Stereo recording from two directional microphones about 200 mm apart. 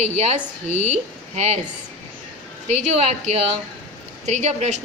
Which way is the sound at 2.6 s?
35° right (ahead or behind).